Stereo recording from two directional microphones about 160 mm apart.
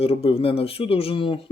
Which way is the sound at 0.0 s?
35° left (ahead or behind).